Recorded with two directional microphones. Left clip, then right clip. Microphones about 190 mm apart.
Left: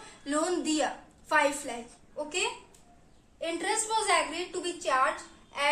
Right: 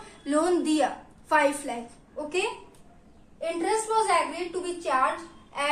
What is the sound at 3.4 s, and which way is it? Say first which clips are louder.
Speech: right 4 dB; 20° left (ahead or behind).